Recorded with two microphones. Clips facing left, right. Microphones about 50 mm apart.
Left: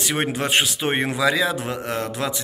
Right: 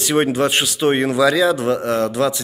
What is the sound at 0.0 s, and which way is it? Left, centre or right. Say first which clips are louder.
A man's voice: right 7 dB; centre.